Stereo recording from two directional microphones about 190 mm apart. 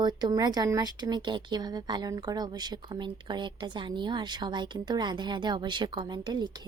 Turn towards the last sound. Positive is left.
turn(degrees=-25)  # may be behind; listen again after turning